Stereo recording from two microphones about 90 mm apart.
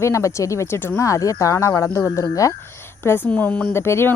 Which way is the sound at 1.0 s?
35° left (ahead or behind).